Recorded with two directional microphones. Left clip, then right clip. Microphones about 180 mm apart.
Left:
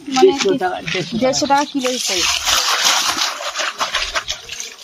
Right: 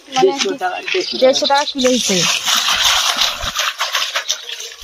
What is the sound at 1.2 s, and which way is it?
Speech, 50° left (ahead or behind).